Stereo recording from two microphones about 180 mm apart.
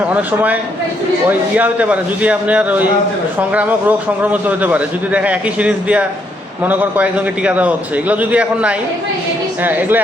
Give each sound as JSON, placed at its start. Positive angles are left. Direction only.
{"t": 0.0, "sound": "a man's voice", "side_deg": -10}